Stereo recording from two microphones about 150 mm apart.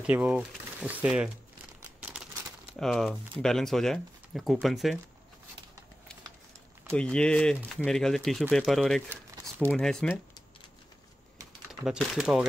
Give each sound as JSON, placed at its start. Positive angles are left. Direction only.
{"t": 0.0, "sound": "speech", "side_deg": -10}
{"t": 0.4, "sound": "a sound", "side_deg": 0}
{"t": 0.8, "sound": "speech", "side_deg": -10}
{"t": 2.8, "sound": "speech", "side_deg": 5}
{"t": 6.9, "sound": "speech", "side_deg": 5}
{"t": 9.1, "sound": "crumpling", "side_deg": -15}
{"t": 9.7, "sound": "speech", "side_deg": 5}
{"t": 11.8, "sound": "speech", "side_deg": -5}